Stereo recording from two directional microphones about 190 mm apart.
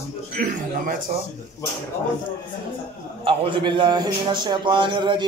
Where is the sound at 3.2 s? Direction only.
25° right (ahead or behind).